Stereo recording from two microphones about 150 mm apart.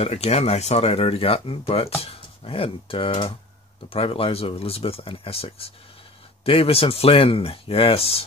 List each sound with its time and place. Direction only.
0.0 s speech: 40° left (ahead or behind)